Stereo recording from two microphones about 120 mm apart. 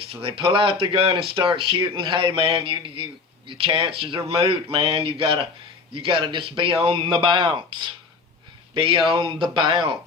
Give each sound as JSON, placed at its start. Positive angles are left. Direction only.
{"t": 0.0, "sound": "speech", "side_deg": -50}